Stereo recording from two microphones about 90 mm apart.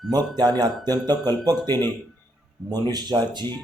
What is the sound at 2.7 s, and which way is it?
Speech, 45° right (ahead or behind).